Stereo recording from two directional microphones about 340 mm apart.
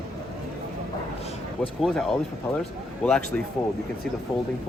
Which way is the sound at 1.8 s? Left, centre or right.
Centre.